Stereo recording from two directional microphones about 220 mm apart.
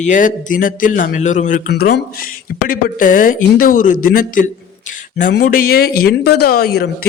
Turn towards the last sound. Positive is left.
turn(degrees=45)  # may be behind; listen again after turning